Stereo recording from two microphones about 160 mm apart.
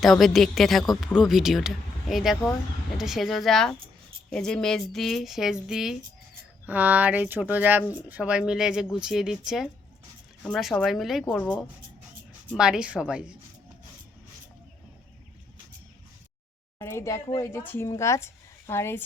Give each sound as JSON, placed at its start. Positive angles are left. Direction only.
{"t": 0.0, "sound": "speech", "side_deg": 0}
{"t": 12.5, "sound": "speech", "side_deg": -5}
{"t": 16.7, "sound": "speech", "side_deg": 15}